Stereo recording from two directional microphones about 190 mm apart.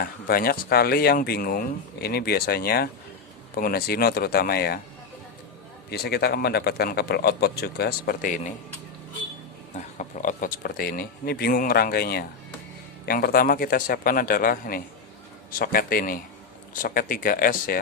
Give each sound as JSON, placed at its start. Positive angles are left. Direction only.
{"t": 0.0, "sound": "speech", "side_deg": 50}
{"t": 5.9, "sound": "a man's voice", "side_deg": 55}
{"t": 9.7, "sound": "speech", "side_deg": 40}